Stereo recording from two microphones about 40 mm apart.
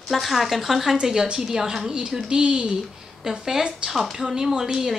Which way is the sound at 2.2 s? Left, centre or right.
Right.